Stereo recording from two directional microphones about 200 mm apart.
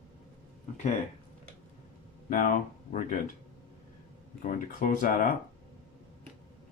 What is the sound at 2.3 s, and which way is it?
Speech, 40° left (ahead or behind).